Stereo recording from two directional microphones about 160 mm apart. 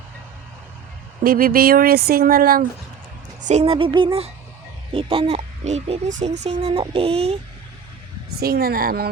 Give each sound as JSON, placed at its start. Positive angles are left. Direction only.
{"t": 1.2, "sound": "speech", "side_deg": -70}
{"t": 3.4, "sound": "speech", "side_deg": -40}
{"t": 8.4, "sound": "speech", "side_deg": -75}